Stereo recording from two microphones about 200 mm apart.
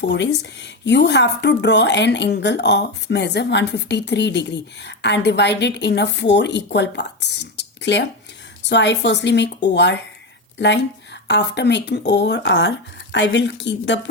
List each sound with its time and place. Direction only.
0.0 s speech: 60° left (ahead or behind)